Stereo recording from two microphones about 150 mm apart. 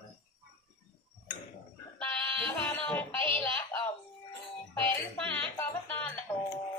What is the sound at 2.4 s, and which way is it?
Music, 10° left (ahead or behind).